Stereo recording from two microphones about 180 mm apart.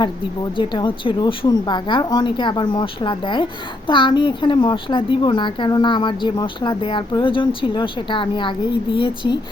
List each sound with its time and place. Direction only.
0.5 s a woman's voice: 25° left (ahead or behind)